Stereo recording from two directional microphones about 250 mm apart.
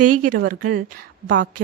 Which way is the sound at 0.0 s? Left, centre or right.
Right.